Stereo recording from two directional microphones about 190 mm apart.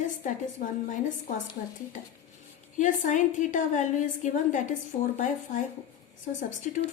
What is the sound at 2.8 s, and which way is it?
A woman's voice, 40° left (ahead or behind).